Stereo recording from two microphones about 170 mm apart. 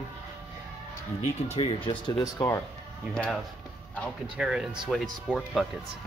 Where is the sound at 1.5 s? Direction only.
35° left (ahead or behind).